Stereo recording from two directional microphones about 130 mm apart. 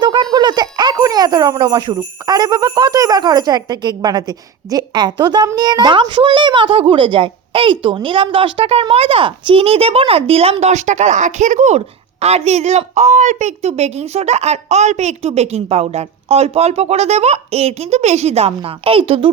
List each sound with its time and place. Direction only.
0.0 s a sound: 35° right (ahead or behind)
1.5 s jingle bell: 35° right (ahead or behind)
5.5 s speech: 30° right (ahead or behind); by 11.8 s 65° right (ahead or behind)
12.2 s a woman's voice: 55° right (ahead or behind)